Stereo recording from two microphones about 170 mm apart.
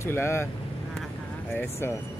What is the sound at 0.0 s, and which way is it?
Speech, 15° left (ahead or behind).